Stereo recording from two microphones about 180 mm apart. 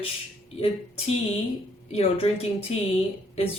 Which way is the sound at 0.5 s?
35° left (ahead or behind).